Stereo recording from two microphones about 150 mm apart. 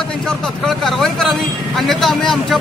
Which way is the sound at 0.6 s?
Centre (ahead or behind).